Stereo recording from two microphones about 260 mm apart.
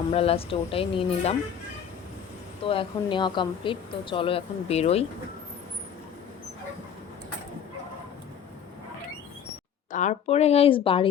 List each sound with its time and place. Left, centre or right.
0.1 s speech: left
2.6 s speech: centre
9.9 s speech: left